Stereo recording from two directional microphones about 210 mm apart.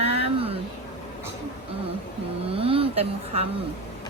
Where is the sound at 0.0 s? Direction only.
30° right (ahead or behind).